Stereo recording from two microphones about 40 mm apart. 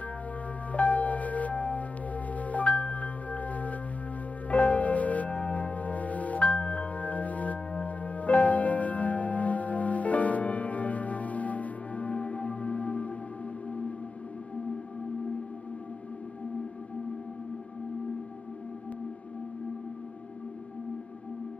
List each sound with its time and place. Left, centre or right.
0.7 s music: left